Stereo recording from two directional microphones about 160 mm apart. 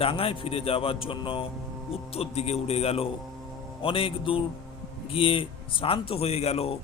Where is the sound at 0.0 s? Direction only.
35° left (ahead or behind).